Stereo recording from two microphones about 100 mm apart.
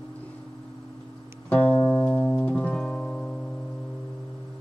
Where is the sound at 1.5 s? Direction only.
15° left (ahead or behind).